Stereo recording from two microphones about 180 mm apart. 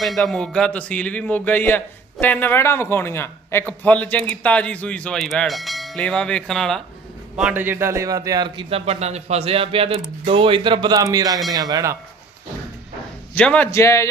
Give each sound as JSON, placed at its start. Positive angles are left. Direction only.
{"t": 0.0, "sound": "a man's voice", "side_deg": 0}
{"t": 4.3, "sound": "bell", "side_deg": 5}
{"t": 7.3, "sound": "a man's voice", "side_deg": -5}
{"t": 13.3, "sound": "a man's voice", "side_deg": 10}